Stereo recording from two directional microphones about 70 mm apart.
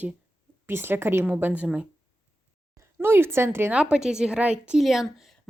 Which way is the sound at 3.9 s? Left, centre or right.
Centre.